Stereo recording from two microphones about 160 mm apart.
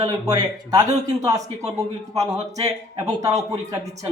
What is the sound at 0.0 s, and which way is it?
Speech, 25° right (ahead or behind).